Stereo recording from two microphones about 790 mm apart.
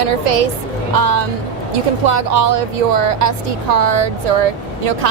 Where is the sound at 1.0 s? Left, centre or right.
Right.